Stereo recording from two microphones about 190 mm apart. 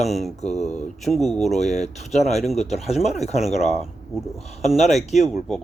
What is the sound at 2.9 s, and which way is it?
Speech, centre (ahead or behind).